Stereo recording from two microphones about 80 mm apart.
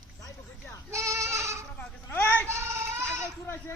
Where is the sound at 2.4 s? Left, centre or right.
Right.